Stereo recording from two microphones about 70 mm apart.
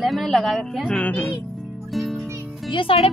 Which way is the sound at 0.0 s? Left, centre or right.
Centre.